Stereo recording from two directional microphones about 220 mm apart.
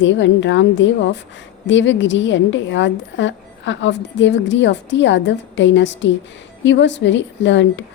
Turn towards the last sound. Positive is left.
turn(degrees=55)  # may be behind; listen again after turning